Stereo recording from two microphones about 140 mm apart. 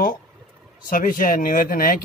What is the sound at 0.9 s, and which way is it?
Speech, 75° left (ahead or behind).